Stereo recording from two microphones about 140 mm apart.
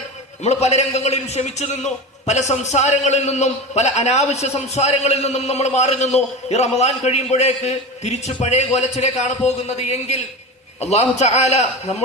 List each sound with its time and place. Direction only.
0.4 s a man's voice: 50° left (ahead or behind)